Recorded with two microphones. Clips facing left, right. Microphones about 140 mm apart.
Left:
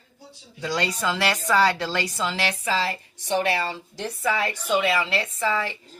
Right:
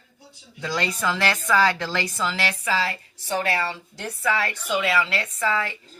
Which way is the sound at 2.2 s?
30° left (ahead or behind).